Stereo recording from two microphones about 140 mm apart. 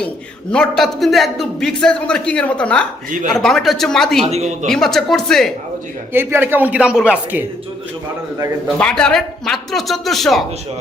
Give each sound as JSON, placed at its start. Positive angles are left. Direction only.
{"t": 0.5, "sound": "a man's voice", "side_deg": 5}
{"t": 4.3, "sound": "speech", "side_deg": -50}
{"t": 4.6, "sound": "a man's voice", "side_deg": 5}
{"t": 6.1, "sound": "speech", "side_deg": -15}
{"t": 8.8, "sound": "a man's voice", "side_deg": 5}